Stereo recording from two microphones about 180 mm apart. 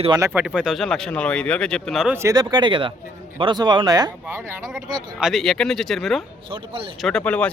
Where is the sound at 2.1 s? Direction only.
20° right (ahead or behind).